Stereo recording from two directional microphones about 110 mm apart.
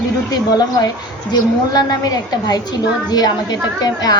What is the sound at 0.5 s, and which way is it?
A woman's voice, 35° left (ahead or behind).